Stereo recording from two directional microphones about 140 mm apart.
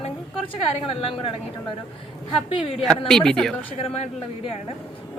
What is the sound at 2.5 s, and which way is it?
Speech, 40° left (ahead or behind).